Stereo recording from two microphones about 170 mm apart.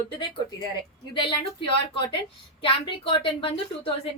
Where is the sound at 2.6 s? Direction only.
30° left (ahead or behind).